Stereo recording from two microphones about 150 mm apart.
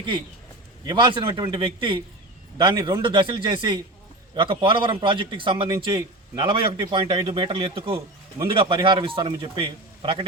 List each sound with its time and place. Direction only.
0.9 s a man's voice: 30° right (ahead or behind)